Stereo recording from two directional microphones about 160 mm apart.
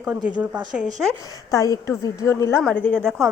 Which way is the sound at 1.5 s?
20° left (ahead or behind).